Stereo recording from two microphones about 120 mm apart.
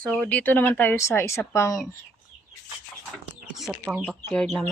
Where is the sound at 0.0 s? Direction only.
10° left (ahead or behind); by 1.8 s 25° left (ahead or behind).